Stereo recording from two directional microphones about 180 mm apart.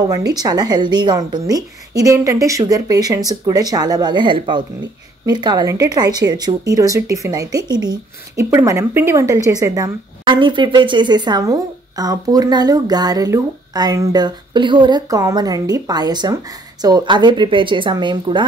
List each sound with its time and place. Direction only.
0.1 s speech: 20° right (ahead or behind)